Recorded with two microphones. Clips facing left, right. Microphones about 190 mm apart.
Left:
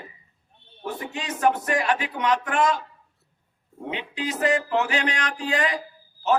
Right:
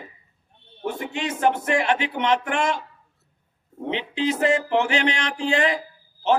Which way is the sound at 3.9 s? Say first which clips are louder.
Right 6 dB; 25° right (ahead or behind).